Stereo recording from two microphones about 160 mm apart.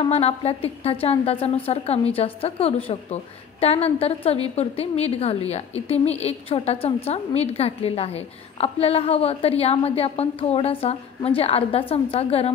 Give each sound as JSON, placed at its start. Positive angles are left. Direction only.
{"t": 0.0, "sound": "a woman's voice", "side_deg": 40}